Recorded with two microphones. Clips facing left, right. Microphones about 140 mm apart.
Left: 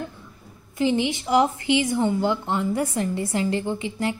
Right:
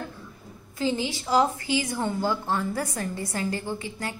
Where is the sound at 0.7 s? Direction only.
20° left (ahead or behind).